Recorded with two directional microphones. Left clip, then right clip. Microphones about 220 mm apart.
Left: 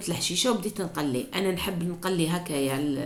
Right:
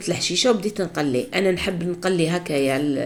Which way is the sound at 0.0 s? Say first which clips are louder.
Right 6 dB; 15° right (ahead or behind).